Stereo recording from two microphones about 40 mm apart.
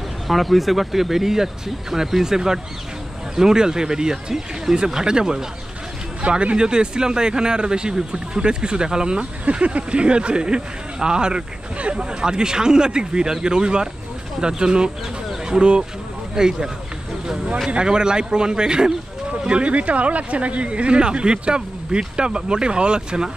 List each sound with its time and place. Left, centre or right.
0.3 s speech: centre; by 23.3 s right